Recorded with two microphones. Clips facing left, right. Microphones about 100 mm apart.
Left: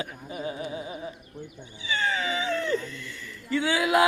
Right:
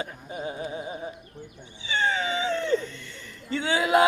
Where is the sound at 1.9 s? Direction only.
30° right (ahead or behind).